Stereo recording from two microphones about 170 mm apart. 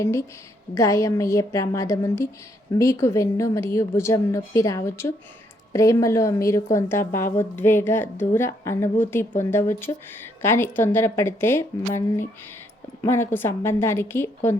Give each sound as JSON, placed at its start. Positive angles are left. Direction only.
{"t": 0.0, "sound": "a woman's voice", "side_deg": 15}